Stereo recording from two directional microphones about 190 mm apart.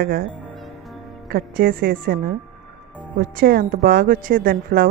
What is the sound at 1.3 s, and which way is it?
Speech, 50° right (ahead or behind).